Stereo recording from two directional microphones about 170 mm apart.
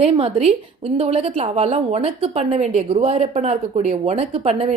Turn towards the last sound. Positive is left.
turn(degrees=-35)  # may be behind; listen again after turning